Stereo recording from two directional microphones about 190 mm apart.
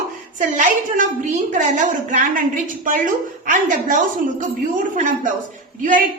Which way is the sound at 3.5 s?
45° right (ahead or behind).